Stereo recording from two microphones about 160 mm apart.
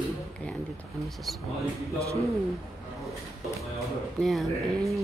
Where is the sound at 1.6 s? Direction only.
20° right (ahead or behind).